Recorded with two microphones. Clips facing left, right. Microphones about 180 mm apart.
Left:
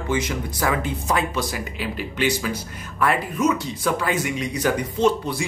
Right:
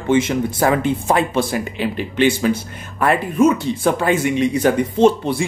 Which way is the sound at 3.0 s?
50° right (ahead or behind).